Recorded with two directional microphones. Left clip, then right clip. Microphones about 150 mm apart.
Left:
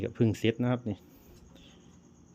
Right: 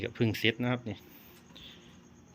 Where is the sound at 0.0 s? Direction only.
60° left (ahead or behind); by 1.0 s 80° left.